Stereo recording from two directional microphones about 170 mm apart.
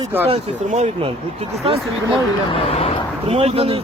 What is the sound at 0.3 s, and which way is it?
Speech, 35° right (ahead or behind).